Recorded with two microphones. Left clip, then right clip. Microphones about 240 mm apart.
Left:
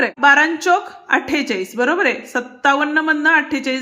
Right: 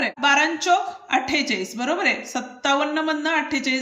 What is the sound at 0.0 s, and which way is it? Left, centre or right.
A woman's voice, centre.